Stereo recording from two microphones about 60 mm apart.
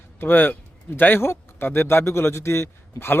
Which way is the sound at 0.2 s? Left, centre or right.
Left.